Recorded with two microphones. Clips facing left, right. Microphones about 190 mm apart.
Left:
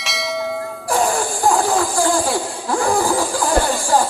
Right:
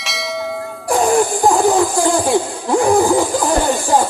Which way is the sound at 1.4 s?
20° right (ahead or behind).